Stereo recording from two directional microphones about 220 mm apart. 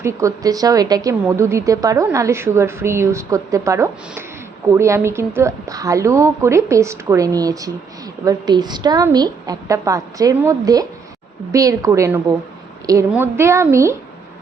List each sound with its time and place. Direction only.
0.0 s a woman's voice: 15° right (ahead or behind)